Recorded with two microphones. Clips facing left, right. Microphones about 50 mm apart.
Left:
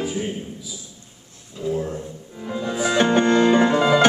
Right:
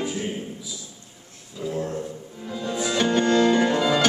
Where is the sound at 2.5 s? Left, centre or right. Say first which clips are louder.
Left 4 dB; left.